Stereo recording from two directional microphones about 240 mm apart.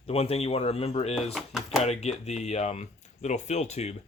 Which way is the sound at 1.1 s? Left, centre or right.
Centre.